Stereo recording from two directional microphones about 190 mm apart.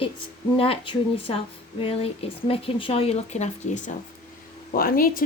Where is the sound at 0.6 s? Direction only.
30° left (ahead or behind).